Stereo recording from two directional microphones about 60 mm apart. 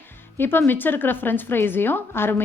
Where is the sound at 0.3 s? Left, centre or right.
Left.